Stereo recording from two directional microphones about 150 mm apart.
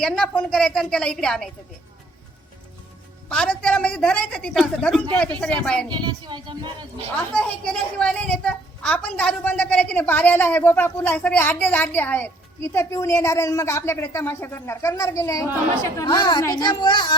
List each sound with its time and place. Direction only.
0.0 s a woman's voice: 5° left (ahead or behind)
3.2 s a woman's voice: 5° left (ahead or behind)
5.9 s speech: 30° right (ahead or behind)
7.2 s a woman's voice: 5° left (ahead or behind); by 17.2 s 30° left (ahead or behind)